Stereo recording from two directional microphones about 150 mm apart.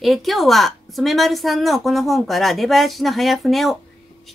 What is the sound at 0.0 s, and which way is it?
Speech, centre (ahead or behind).